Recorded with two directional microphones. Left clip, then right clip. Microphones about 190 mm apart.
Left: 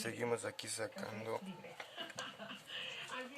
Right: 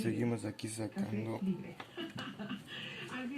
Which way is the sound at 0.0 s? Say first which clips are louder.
Right 2 dB; 15° left (ahead or behind).